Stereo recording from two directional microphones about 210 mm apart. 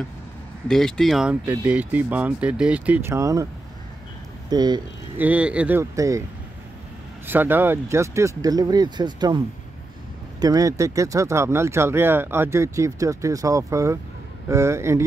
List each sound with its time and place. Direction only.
0.7 s speech: centre (ahead or behind); by 3.4 s 15° right (ahead or behind)
4.5 s speech: 20° right (ahead or behind)
5.1 s speech: 5° right (ahead or behind)
7.2 s speech: 10° right (ahead or behind)
10.4 s speech: 15° right (ahead or behind)